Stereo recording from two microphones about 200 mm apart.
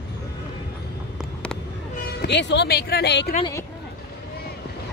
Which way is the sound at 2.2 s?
60° left (ahead or behind).